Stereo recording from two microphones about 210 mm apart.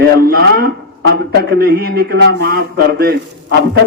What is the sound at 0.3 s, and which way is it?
Speech, 45° right (ahead or behind).